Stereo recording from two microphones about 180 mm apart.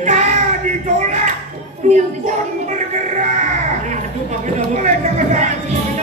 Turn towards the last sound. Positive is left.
turn(degrees=-40)  # may be behind; listen again after turning